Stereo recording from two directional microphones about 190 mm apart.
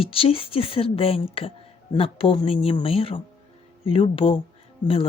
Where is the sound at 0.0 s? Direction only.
30° left (ahead or behind).